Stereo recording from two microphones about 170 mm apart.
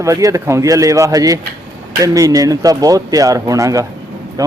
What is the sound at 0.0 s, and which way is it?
Speech, 20° right (ahead or behind).